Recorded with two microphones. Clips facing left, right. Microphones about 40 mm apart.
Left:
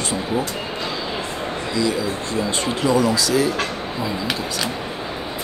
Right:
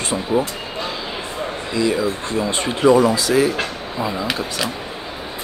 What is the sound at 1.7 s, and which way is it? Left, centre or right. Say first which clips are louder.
Speech: right 3 dB; right.